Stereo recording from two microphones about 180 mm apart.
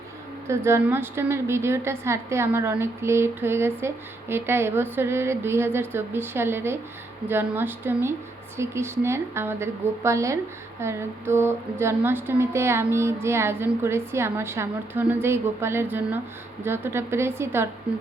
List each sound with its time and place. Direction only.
0.4 s a woman's voice: 15° right (ahead or behind)